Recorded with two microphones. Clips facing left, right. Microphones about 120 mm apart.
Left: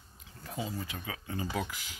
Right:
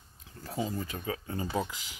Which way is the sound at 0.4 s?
35° right (ahead or behind).